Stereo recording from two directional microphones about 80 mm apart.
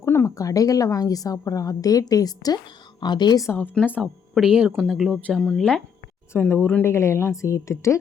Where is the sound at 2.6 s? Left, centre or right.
Left.